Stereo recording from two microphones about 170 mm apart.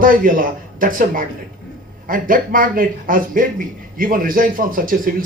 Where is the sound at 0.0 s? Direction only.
55° right (ahead or behind).